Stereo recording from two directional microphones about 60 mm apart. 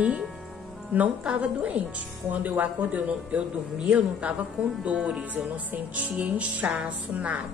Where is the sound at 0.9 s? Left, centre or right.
Right.